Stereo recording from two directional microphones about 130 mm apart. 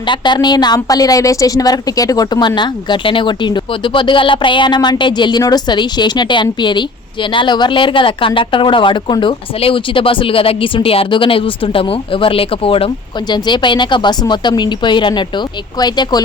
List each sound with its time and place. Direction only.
0.1 s a woman's voice: 35° left (ahead or behind)